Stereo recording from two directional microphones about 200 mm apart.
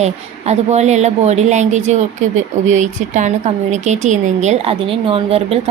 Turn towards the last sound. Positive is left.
turn(degrees=-30)  # may be behind; listen again after turning